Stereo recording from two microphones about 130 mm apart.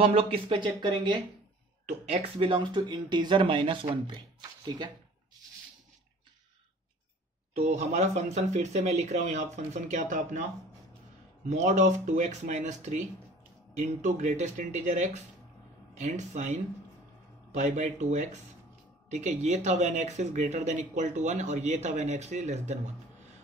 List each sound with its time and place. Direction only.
0.0 s speech: 45° right (ahead or behind)
1.9 s speech: 55° right (ahead or behind); by 4.9 s 35° right (ahead or behind)
7.5 s speech: 60° right (ahead or behind); by 10.4 s 80° right
11.4 s speech: 65° right (ahead or behind)